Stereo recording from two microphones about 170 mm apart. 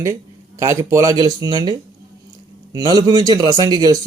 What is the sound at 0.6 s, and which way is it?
Speech, 15° right (ahead or behind).